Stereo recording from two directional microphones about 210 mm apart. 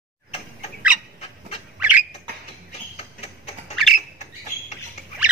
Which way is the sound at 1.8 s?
5° right (ahead or behind).